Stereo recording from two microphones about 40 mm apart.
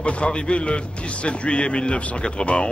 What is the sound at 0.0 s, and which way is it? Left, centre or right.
A man's voice, left.